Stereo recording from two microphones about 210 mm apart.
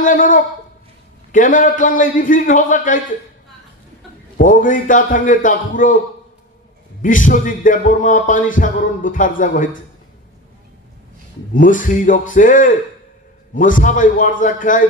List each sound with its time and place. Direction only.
0.0 s a sound: 40° left (ahead or behind)
1.3 s speech: 40° left (ahead or behind)
4.4 s speech: 40° left (ahead or behind)
7.0 s speech: 40° left (ahead or behind)
11.5 s speech: 40° left (ahead or behind)